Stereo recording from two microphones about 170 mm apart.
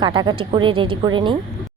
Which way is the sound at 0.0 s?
25° right (ahead or behind).